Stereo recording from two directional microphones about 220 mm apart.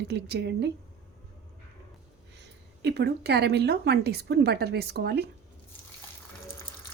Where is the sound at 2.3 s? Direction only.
50° right (ahead or behind).